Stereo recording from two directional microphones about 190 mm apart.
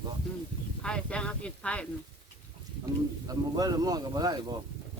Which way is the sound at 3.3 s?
20° right (ahead or behind).